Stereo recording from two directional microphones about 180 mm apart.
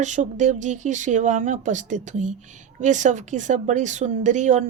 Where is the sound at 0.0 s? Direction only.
40° right (ahead or behind).